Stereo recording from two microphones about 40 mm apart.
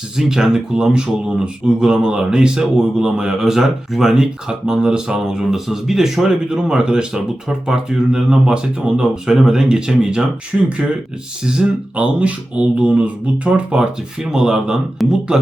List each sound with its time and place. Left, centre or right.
0.2 s speech: centre
3.4 s speech: centre; by 9.3 s right
9.3 s speech: centre
11.9 s speech: right
15.0 s speech: centre